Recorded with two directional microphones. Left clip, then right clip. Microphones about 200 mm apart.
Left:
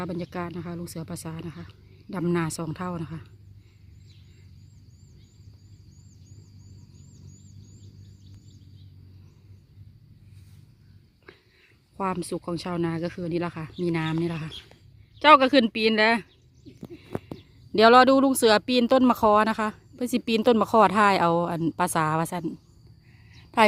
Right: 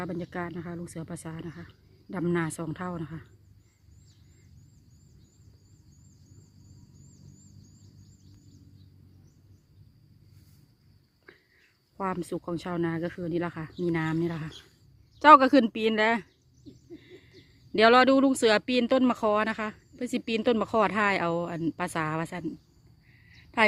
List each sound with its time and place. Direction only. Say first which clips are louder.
0.0 s speech: left 2 dB; 10° left (ahead or behind)
11.9 s speech: left 3 dB; 10° left (ahead or behind)
15.2 s speech: even; centre (ahead or behind)
17.7 s speech: left 4 dB; 10° left (ahead or behind)
23.3 s a sound: left 4 dB; 15° left (ahead or behind)